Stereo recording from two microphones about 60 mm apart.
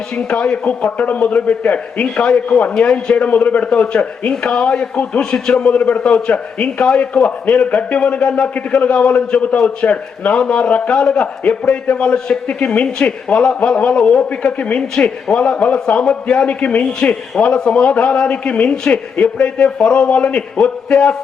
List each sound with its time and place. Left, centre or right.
0.2 s a man's voice: centre